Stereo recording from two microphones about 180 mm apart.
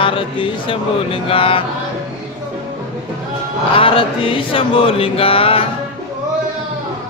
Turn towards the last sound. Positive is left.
turn(degrees=30)  # may be behind; listen again after turning